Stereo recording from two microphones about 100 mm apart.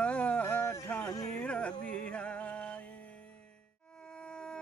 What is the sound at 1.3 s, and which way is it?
Music, 10° left (ahead or behind).